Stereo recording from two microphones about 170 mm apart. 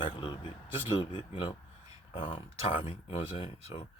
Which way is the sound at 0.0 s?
25° left (ahead or behind).